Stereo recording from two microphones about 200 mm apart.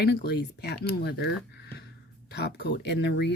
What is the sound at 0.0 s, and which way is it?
Speech, 55° left (ahead or behind).